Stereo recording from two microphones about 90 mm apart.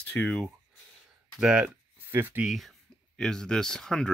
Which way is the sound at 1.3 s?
5° right (ahead or behind).